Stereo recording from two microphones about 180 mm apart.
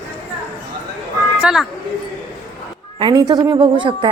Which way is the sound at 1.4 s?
5° right (ahead or behind).